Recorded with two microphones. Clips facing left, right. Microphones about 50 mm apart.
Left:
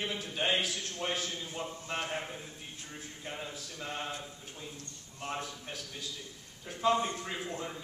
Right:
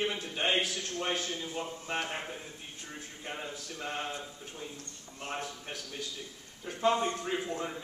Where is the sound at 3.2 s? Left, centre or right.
Right.